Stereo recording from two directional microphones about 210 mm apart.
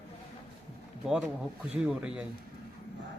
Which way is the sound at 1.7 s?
5° right (ahead or behind).